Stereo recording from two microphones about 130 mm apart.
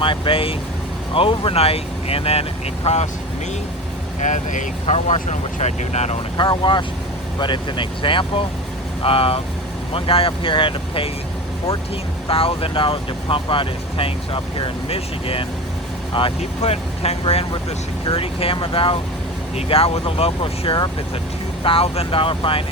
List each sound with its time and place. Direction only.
0.0 s speech: 40° left (ahead or behind)
4.2 s speech: 75° left (ahead or behind)
6.3 s speech: 35° left (ahead or behind)
12.3 s speech: 45° left (ahead or behind)